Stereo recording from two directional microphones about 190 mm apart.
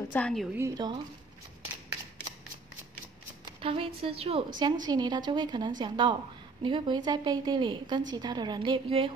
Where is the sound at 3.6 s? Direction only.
30° right (ahead or behind).